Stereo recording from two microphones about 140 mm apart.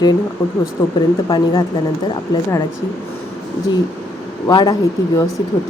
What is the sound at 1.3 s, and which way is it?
Speech, 30° left (ahead or behind).